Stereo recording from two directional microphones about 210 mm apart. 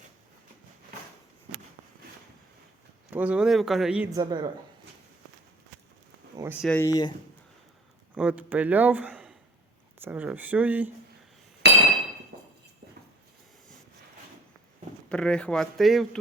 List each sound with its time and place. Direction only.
3.1 s a man's voice: 5° right (ahead or behind)
4.2 s speech: 20° right (ahead or behind)
6.3 s a sound: 15° right (ahead or behind)
6.6 s a man's voice: 5° left (ahead or behind)
6.8 s speech: 15° left (ahead or behind)
8.1 s a man's voice: 5° right (ahead or behind)
11.6 s chink: 50° right (ahead or behind)
15.1 s a man's voice: 5° left (ahead or behind)